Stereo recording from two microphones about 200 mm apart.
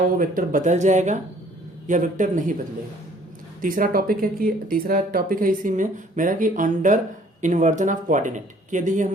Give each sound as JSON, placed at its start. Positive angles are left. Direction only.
{"t": 0.0, "sound": "speech", "side_deg": -45}
{"t": 3.6, "sound": "speech", "side_deg": -45}